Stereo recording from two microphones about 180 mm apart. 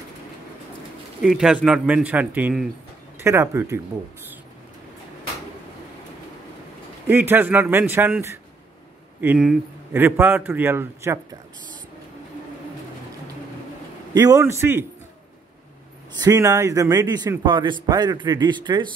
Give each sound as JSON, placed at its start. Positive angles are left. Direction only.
{"t": 1.2, "sound": "a man's voice", "side_deg": -5}
{"t": 7.1, "sound": "a man's voice", "side_deg": -10}
{"t": 14.1, "sound": "a man's voice", "side_deg": -20}
{"t": 16.2, "sound": "a man's voice", "side_deg": -20}